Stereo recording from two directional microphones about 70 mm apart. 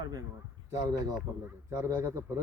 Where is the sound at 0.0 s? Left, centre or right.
Right.